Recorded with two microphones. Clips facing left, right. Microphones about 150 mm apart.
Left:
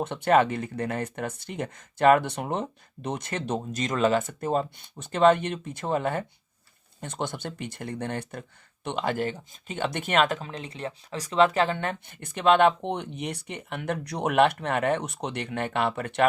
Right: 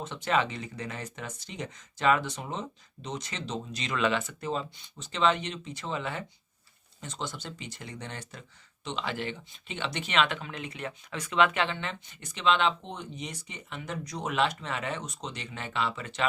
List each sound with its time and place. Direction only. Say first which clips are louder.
0.0 s speech: left 7 dB; 55° left (ahead or behind)